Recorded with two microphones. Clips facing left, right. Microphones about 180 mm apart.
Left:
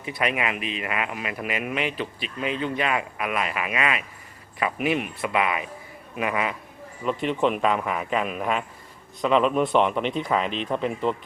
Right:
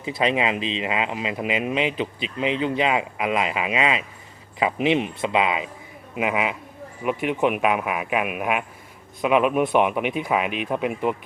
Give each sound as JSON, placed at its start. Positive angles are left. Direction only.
{"t": 0.0, "sound": "speech", "side_deg": -25}